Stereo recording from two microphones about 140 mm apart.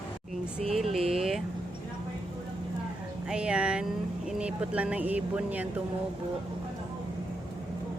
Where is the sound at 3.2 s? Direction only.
5° right (ahead or behind).